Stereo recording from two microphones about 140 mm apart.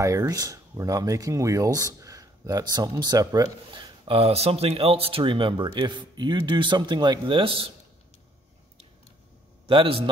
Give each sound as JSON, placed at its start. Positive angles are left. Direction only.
{"t": 0.0, "sound": "speech", "side_deg": -25}
{"t": 9.7, "sound": "speech", "side_deg": -40}